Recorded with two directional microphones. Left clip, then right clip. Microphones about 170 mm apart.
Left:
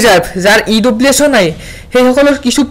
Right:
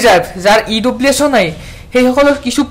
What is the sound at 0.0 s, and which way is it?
Speech, 20° left (ahead or behind).